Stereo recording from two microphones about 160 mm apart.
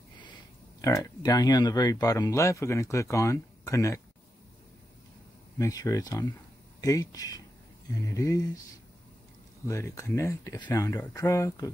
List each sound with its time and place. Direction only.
0.7 s speech: 20° left (ahead or behind)
5.6 s speech: 20° left (ahead or behind)
9.7 s speech: 15° left (ahead or behind)